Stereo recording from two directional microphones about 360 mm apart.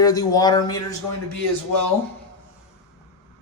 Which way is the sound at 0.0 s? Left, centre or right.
Centre.